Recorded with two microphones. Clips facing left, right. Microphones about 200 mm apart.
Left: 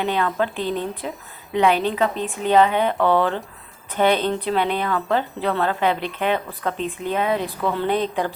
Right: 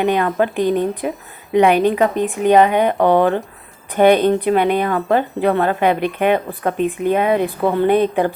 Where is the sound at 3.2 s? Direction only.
50° right (ahead or behind).